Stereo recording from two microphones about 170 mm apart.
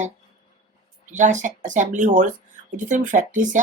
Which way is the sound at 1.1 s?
45° right (ahead or behind).